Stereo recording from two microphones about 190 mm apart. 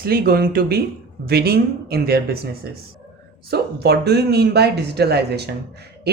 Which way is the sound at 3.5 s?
60° right (ahead or behind).